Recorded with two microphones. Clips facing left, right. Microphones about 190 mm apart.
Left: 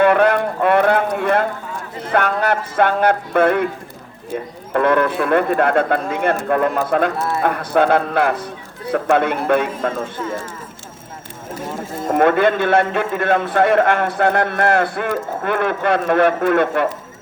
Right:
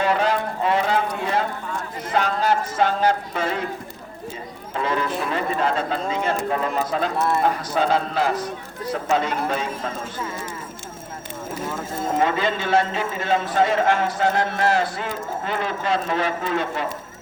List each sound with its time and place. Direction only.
0.0 s a sound: 60° left (ahead or behind)
2.0 s speech: 60° left (ahead or behind)
4.7 s speech: 60° left (ahead or behind)
12.1 s speech: 60° left (ahead or behind)